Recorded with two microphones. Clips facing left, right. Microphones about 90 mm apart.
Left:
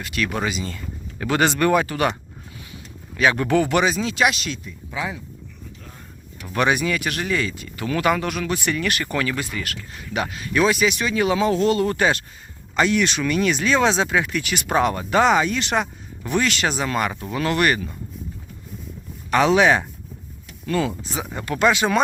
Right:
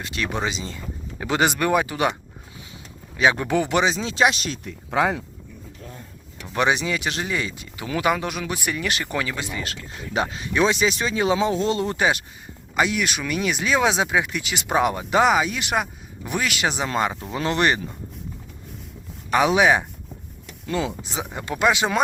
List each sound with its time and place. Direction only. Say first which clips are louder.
0.0 s speech: left 2 dB; 25° right (ahead or behind)
3.2 s speech: left 1 dB; 20° right (ahead or behind); by 4.6 s 40° right (ahead or behind)
4.6 s speech: right 12 dB; 75° right (ahead or behind)
6.5 s speech: left 1 dB; 20° right (ahead or behind)
19.3 s speech: left 1 dB; 15° right (ahead or behind)